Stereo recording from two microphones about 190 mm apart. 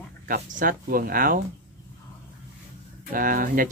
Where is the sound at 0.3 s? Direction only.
50° right (ahead or behind).